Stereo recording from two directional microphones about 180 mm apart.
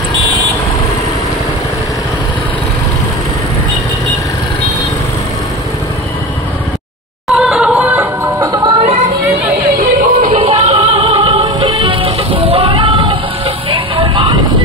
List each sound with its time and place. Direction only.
7.2 s music: centre (ahead or behind); by 8.7 s 20° right (ahead or behind)
9.8 s music: 50° right (ahead or behind)
10.3 s music: 35° right (ahead or behind)